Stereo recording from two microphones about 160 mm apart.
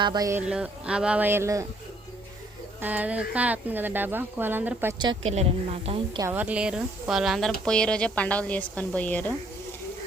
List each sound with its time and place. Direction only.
0.0 s speech: 25° right (ahead or behind)
0.4 s speech: 5° right (ahead or behind)
2.8 s speech: 10° right (ahead or behind)
5.3 s speech: 40° right (ahead or behind)
6.1 s a woman's voice: 15° right (ahead or behind); by 9.3 s 10° left (ahead or behind)